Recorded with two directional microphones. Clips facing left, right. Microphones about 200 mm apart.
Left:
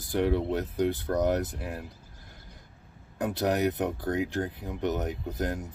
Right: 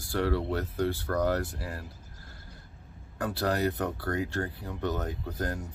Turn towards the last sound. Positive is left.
turn(degrees=20)  # may be behind; listen again after turning